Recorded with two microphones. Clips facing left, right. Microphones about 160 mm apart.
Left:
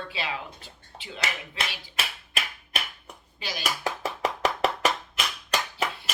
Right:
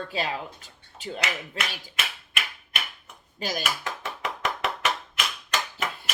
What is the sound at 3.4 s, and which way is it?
Speech, 45° right (ahead or behind).